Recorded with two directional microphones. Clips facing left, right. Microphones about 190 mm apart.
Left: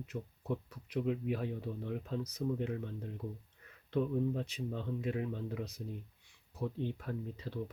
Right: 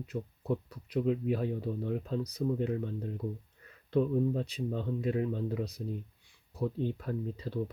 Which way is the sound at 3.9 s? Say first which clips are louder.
Right 5 dB; 35° right (ahead or behind).